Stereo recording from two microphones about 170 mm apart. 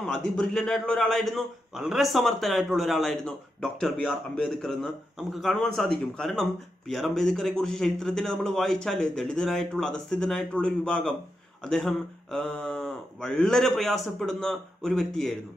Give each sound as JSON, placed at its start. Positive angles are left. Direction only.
{"t": 0.0, "sound": "a man's voice", "side_deg": 5}